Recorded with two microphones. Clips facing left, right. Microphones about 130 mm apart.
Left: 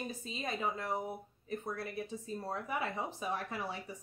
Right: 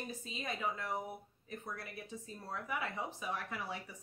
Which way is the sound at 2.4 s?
30° left (ahead or behind).